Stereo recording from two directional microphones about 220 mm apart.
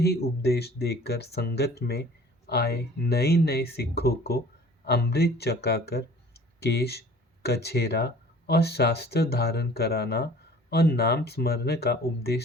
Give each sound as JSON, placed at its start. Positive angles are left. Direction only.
{"t": 0.0, "sound": "speech", "side_deg": 45}